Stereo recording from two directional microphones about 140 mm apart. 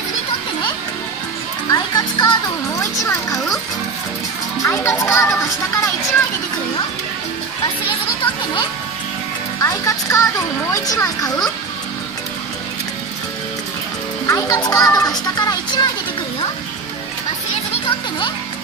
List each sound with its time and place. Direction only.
1.7 s a child's voice: 30° left (ahead or behind)
4.6 s a child's voice: 20° left (ahead or behind)
9.6 s a child's voice: 25° left (ahead or behind)
14.2 s a child's voice: 25° left (ahead or behind)